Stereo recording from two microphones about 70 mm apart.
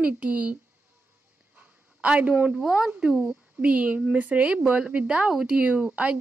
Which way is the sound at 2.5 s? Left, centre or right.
Centre.